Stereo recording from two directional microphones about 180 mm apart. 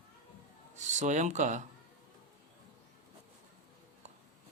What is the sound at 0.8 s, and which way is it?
Speech, 40° right (ahead or behind).